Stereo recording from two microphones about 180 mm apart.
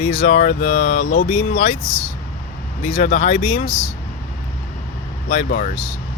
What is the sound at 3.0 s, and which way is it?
Speech, 45° left (ahead or behind).